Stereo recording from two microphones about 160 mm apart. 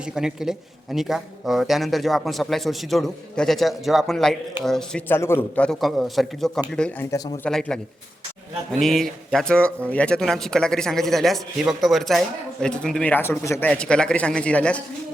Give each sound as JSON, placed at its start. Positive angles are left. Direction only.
{"t": 0.0, "sound": "a man's voice", "side_deg": -5}
{"t": 8.8, "sound": "a man's voice", "side_deg": 0}